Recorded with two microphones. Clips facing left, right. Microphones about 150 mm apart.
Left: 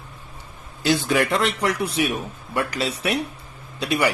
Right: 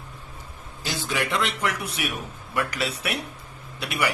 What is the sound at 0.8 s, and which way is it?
Speech, 75° left (ahead or behind).